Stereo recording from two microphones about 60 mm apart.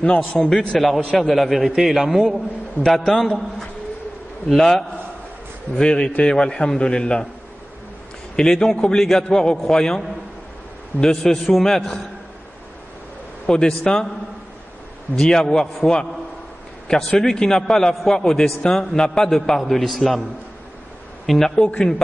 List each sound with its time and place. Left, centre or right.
0.4 s a man's voice: centre
4.5 s a man's voice: centre
8.4 s a man's voice: centre
13.5 s a man's voice: centre
15.1 s a man's voice: centre
21.3 s a man's voice: centre